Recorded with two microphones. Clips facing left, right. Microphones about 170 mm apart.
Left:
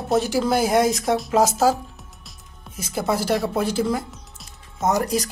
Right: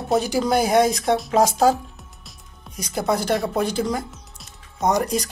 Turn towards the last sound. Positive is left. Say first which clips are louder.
# even
turn(degrees=0)  # may be behind; listen again after turning